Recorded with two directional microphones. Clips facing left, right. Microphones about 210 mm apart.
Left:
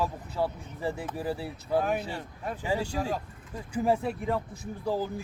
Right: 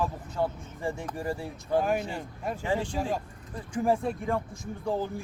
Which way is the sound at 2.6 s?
10° left (ahead or behind).